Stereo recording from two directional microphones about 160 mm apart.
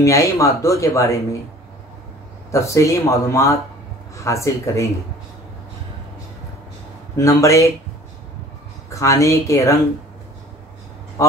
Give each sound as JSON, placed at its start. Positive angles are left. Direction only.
{"t": 0.0, "sound": "speech", "side_deg": 20}
{"t": 2.5, "sound": "speech", "side_deg": 20}
{"t": 7.2, "sound": "speech", "side_deg": 20}
{"t": 8.9, "sound": "speech", "side_deg": 20}
{"t": 11.2, "sound": "a man's voice", "side_deg": 20}